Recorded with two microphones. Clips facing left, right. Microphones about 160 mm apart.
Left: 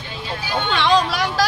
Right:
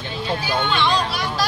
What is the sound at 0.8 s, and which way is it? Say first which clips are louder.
Speech: left 4 dB; 90° left.